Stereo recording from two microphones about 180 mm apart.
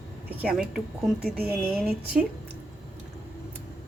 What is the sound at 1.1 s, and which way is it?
Speech, 60° right (ahead or behind).